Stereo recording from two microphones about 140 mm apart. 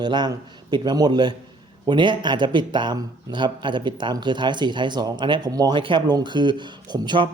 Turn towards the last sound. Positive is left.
turn(degrees=-30)  # may be behind; listen again after turning